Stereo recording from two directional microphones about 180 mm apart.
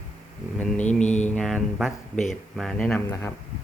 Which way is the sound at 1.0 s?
40° left (ahead or behind).